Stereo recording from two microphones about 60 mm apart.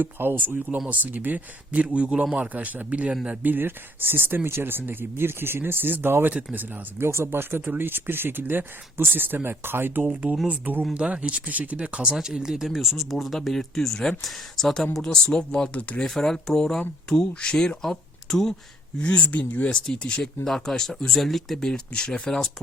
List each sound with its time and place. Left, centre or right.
0.0 s speech: right
3.4 s speech: right
6.3 s speech: right
7.0 s speech: right
11.8 s speech: centre
18.9 s speech: centre
21.7 s speech: centre